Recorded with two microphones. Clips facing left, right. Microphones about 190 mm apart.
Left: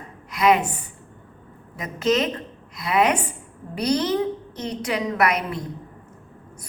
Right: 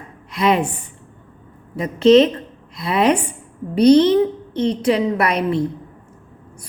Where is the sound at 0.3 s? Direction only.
30° right (ahead or behind).